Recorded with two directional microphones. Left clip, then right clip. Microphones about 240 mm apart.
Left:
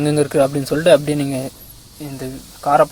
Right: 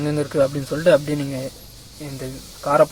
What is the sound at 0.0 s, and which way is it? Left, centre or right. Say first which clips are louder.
Speech: left 4 dB; left.